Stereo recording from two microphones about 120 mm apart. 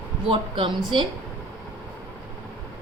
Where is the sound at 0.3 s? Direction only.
45° right (ahead or behind).